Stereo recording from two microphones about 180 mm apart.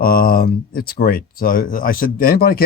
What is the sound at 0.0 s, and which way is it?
Speech, 55° left (ahead or behind).